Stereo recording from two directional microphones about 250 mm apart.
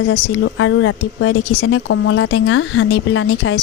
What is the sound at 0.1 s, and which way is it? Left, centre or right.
Speech, left.